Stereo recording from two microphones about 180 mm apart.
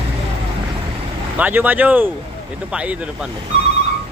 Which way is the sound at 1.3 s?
10° right (ahead or behind).